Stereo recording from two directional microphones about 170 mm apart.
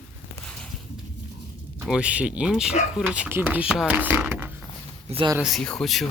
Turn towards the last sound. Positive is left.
turn(degrees=0)  # may be behind; listen again after turning